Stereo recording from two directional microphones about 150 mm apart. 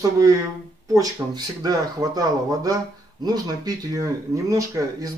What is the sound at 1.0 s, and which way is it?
Speech, 25° right (ahead or behind).